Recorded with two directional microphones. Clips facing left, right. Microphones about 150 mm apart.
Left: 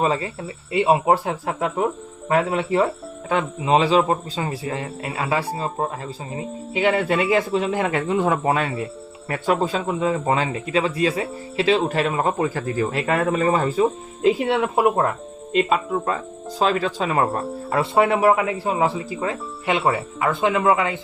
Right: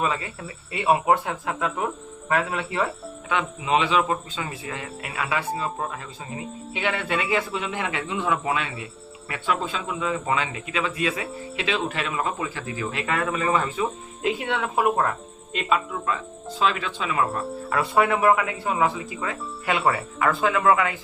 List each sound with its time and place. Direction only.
0.0 s speech: 30° left (ahead or behind)
14.6 s speech: 25° left (ahead or behind)
15.5 s speech: 35° left (ahead or behind)
17.7 s speech: 30° left (ahead or behind)